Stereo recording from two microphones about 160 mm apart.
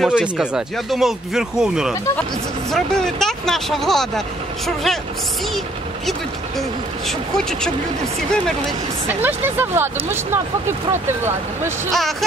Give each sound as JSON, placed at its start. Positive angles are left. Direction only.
{"t": 0.0, "sound": "speech", "side_deg": -5}
{"t": 7.1, "sound": "speech", "side_deg": 5}
{"t": 9.0, "sound": "speech", "side_deg": -15}
{"t": 11.9, "sound": "speech", "side_deg": 0}